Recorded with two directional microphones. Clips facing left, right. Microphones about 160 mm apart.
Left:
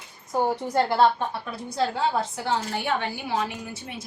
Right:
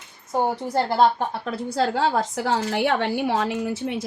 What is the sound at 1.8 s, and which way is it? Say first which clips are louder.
A woman's voice: right 3 dB; 90° right.